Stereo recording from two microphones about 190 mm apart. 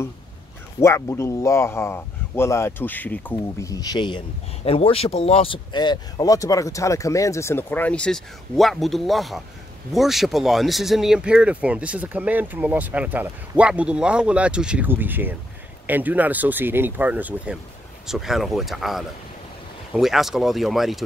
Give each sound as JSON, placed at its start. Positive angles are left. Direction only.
{"t": 0.7, "sound": "speech", "side_deg": 15}